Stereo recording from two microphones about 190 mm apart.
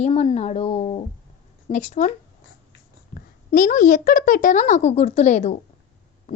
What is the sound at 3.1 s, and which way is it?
A woman's voice, 50° left (ahead or behind).